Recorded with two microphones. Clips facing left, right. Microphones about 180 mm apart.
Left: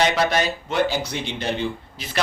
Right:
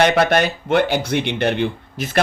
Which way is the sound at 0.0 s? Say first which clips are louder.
Right 5 dB; 60° right (ahead or behind).